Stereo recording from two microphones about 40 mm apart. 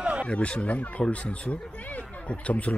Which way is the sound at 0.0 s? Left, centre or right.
Right.